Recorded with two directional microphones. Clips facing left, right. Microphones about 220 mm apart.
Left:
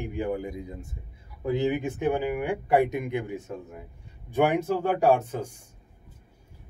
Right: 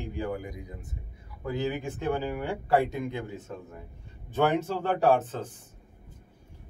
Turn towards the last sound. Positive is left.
turn(degrees=10)  # may be behind; listen again after turning